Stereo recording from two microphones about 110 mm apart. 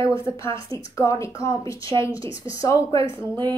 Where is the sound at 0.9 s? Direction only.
30° left (ahead or behind).